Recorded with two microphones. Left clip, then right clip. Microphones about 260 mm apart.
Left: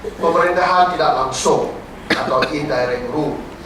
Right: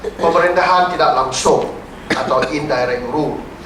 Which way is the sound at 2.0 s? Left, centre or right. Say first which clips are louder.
Right 1 dB; centre.